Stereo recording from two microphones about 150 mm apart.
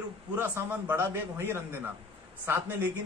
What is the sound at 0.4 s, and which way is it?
A man's voice, 15° right (ahead or behind).